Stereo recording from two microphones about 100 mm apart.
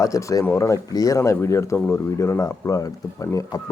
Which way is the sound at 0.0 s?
30° left (ahead or behind).